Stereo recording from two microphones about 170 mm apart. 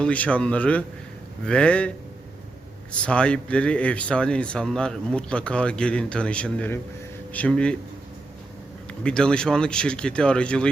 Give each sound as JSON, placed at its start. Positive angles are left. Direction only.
{"t": 0.0, "sound": "speech", "side_deg": 10}
{"t": 2.9, "sound": "speech", "side_deg": 5}
{"t": 8.9, "sound": "speech", "side_deg": 5}